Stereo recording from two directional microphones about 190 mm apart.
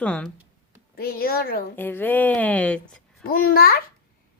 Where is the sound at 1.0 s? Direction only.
50° left (ahead or behind).